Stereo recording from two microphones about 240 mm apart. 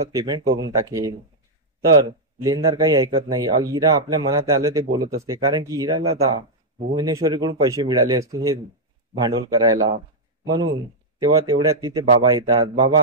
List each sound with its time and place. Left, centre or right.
0.1 s speech: centre
11.1 s speech: centre